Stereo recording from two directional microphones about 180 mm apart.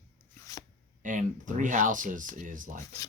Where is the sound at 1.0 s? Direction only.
45° right (ahead or behind).